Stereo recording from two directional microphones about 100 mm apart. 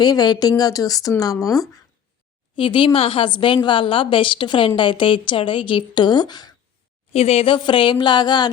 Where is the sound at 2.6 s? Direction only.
55° left (ahead or behind).